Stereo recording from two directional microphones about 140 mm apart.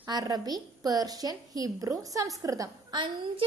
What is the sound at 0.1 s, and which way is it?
A woman's voice, 30° right (ahead or behind).